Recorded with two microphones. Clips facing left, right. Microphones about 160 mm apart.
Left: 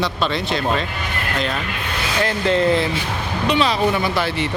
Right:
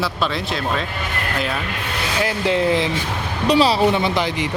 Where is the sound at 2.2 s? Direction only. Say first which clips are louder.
Left 1 dB; 10° right (ahead or behind).